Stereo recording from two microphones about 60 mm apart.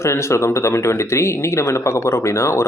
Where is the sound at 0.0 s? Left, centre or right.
Left.